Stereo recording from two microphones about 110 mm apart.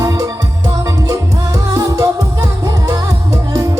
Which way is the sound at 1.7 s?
30° right (ahead or behind).